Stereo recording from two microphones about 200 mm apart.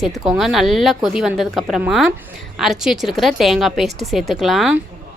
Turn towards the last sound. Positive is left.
turn(degrees=0)  # may be behind; listen again after turning